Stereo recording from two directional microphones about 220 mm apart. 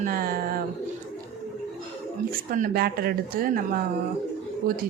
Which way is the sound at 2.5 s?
40° right (ahead or behind).